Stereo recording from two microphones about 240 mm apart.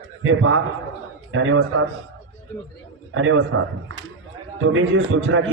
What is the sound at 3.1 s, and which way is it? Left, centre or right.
Speech, right.